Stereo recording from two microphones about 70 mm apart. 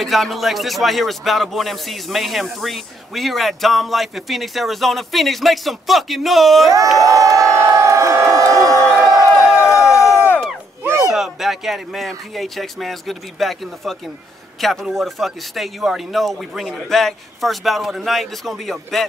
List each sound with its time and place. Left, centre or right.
0.0 s speech: centre
7.0 s crowd: right
8.9 s crowd: centre
9.6 s a sound: left
10.8 s a sound: right
11.1 s speech: centre